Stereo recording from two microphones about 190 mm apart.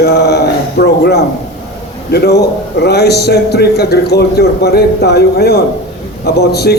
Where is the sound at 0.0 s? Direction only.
60° left (ahead or behind).